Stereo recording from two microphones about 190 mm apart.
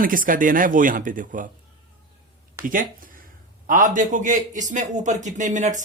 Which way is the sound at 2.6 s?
45° right (ahead or behind).